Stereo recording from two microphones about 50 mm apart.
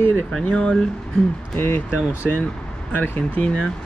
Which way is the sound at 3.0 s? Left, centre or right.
Left.